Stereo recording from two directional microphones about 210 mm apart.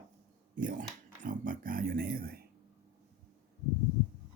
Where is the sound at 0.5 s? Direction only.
40° right (ahead or behind).